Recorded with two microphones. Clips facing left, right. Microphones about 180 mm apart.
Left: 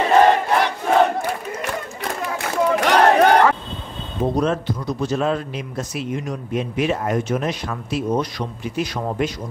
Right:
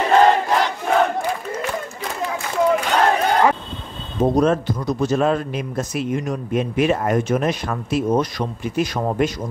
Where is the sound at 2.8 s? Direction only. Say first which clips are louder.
Left 4 dB; 75° left (ahead or behind).